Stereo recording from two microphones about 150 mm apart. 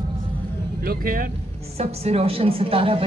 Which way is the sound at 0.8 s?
80° right.